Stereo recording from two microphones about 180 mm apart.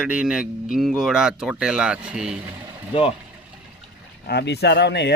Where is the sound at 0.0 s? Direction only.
5° right (ahead or behind).